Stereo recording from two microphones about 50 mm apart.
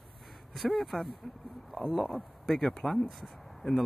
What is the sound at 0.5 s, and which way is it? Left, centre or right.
Speech, centre.